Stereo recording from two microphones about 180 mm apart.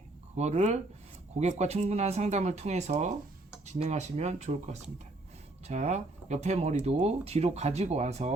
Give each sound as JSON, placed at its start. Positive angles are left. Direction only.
{"t": 0.3, "sound": "speech", "side_deg": -40}